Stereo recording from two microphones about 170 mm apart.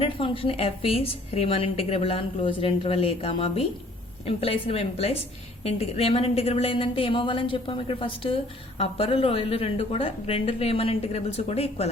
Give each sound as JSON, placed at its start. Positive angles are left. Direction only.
{"t": 0.0, "sound": "a woman's voice", "side_deg": 35}